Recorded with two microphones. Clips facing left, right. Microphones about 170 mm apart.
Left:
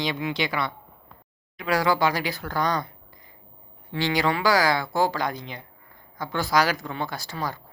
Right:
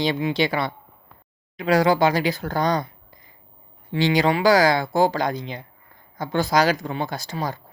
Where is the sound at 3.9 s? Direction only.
20° right (ahead or behind).